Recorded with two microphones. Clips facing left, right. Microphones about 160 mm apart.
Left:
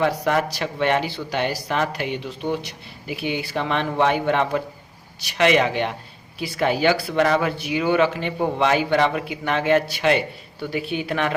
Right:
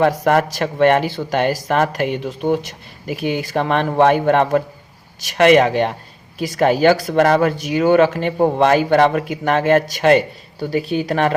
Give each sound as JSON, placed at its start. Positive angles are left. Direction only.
{"t": 0.0, "sound": "speech", "side_deg": -50}